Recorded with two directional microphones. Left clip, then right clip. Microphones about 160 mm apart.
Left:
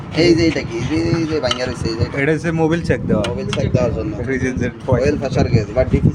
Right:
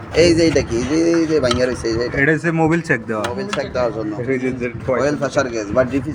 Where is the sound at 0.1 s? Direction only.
90° right.